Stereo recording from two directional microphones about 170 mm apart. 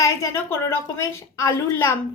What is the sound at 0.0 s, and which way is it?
A woman's voice, 15° left (ahead or behind).